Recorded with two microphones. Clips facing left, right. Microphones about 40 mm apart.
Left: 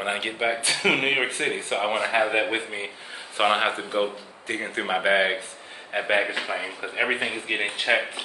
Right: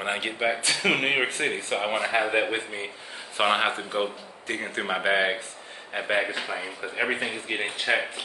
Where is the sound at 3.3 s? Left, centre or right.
Centre.